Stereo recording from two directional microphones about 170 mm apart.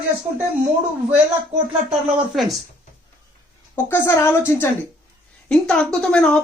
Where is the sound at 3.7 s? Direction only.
15° left (ahead or behind).